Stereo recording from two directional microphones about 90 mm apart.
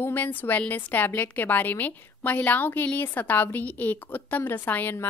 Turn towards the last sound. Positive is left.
turn(degrees=20)  # may be behind; listen again after turning